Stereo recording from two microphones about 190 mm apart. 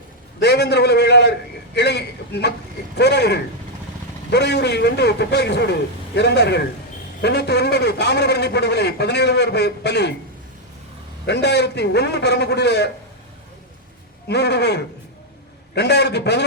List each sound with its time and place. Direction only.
0.3 s a sound: 60° left (ahead or behind)
3.0 s a man's voice: 60° left (ahead or behind)
11.3 s a man's voice: 60° left (ahead or behind)
14.3 s a man's voice: 60° left (ahead or behind)